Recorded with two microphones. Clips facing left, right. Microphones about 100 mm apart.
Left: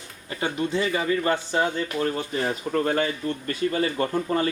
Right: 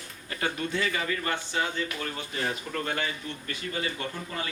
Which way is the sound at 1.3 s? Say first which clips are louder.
Left 6 dB; 40° left (ahead or behind).